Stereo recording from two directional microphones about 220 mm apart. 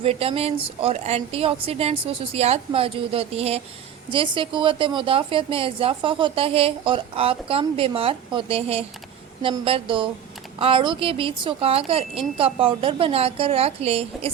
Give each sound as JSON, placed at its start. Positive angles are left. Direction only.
{"t": 0.0, "sound": "a woman's voice", "side_deg": -25}